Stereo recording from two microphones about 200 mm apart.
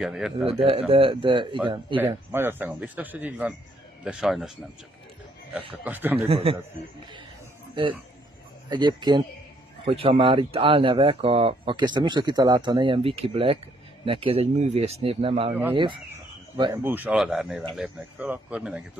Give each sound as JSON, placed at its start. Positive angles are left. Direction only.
{"t": 0.0, "sound": "speech", "side_deg": 0}
{"t": 0.5, "sound": "speech", "side_deg": -30}
{"t": 2.0, "sound": "speech", "side_deg": -10}
{"t": 5.9, "sound": "speech", "side_deg": -10}
{"t": 6.1, "sound": "speech", "side_deg": -30}
{"t": 8.6, "sound": "speech", "side_deg": -20}
{"t": 16.8, "sound": "speech", "side_deg": -10}